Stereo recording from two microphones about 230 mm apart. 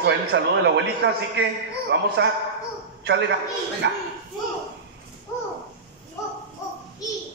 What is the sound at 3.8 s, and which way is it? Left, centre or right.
Speech, right.